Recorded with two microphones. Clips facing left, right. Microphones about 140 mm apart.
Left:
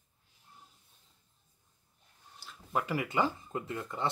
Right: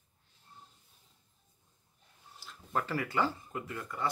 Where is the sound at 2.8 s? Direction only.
15° left (ahead or behind).